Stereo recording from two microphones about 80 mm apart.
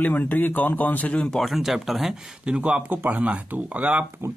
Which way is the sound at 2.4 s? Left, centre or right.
Centre.